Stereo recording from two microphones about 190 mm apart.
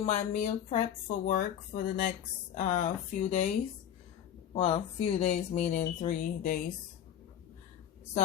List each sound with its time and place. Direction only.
0.0 s speech: 35° left (ahead or behind)
4.5 s speech: 30° left (ahead or behind)